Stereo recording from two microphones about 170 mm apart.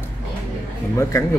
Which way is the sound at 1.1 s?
20° left (ahead or behind).